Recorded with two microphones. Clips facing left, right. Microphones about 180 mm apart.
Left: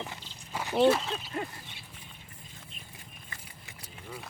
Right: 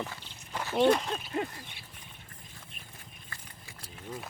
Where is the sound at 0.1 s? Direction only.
15° left (ahead or behind).